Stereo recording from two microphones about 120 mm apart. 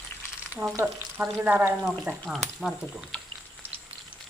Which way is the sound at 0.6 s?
25° right (ahead or behind).